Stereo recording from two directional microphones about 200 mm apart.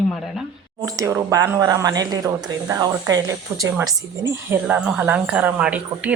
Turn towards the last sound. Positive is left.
turn(degrees=-5)  # may be behind; listen again after turning